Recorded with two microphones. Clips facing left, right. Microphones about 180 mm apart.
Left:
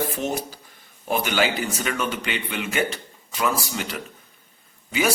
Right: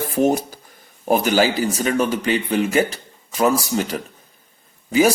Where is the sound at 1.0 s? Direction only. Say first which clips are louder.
Right 6 dB; 45° right (ahead or behind).